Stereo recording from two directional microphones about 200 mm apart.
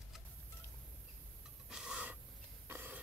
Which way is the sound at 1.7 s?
5° right (ahead or behind).